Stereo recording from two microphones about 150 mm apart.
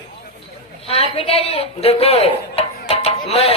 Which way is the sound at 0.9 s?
40° left (ahead or behind).